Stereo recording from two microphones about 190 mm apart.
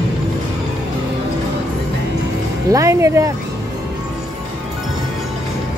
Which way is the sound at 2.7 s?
15° right (ahead or behind).